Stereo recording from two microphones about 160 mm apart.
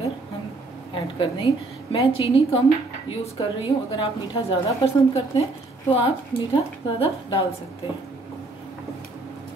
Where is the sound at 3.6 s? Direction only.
35° left (ahead or behind).